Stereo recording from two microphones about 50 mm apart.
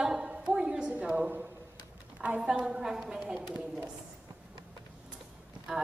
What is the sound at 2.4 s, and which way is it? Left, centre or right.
Speech, centre.